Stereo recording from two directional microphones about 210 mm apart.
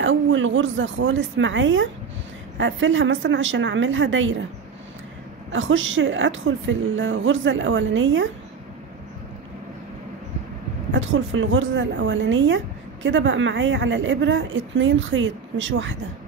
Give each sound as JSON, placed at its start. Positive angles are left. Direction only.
{"t": 0.0, "sound": "a woman's voice", "side_deg": -65}
{"t": 5.5, "sound": "a woman's voice", "side_deg": -65}
{"t": 10.9, "sound": "a woman's voice", "side_deg": -65}